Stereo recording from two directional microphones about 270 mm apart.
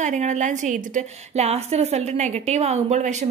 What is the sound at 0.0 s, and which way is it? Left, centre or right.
A woman's voice, right.